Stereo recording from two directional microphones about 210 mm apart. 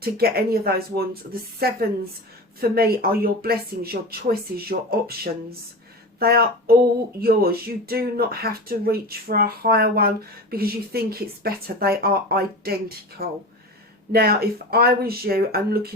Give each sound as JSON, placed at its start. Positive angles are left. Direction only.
{"t": 0.0, "sound": "speech", "side_deg": -45}